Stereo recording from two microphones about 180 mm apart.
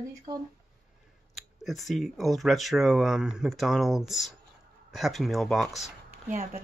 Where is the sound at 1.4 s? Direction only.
Centre (ahead or behind).